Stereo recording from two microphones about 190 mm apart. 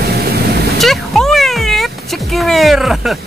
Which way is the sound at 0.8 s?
Centre (ahead or behind).